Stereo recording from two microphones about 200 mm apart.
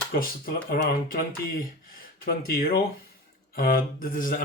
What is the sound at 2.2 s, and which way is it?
Speech, 50° left (ahead or behind).